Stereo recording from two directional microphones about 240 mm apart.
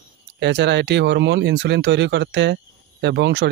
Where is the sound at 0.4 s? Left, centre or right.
Right.